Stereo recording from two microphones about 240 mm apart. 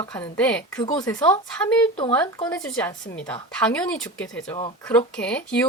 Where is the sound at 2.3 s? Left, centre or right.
Centre.